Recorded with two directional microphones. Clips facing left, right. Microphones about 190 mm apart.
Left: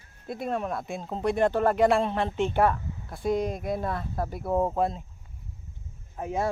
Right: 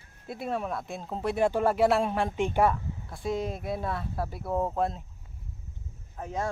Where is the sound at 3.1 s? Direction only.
Centre (ahead or behind).